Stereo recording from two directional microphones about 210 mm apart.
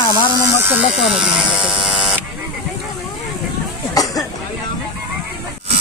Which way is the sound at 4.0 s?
15° left (ahead or behind).